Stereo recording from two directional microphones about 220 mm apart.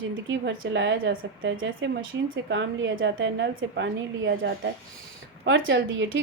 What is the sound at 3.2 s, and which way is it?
A woman's voice, 55° right (ahead or behind).